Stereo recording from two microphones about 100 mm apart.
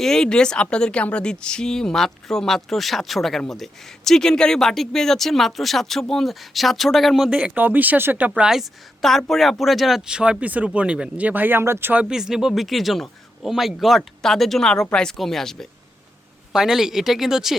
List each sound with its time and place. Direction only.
0.0 s speech: 5° left (ahead or behind)
7.3 s a woman's voice: 10° right (ahead or behind)
12.0 s speech: 5° right (ahead or behind)